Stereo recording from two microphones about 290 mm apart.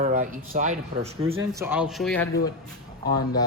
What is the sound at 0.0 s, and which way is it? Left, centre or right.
Speech, right.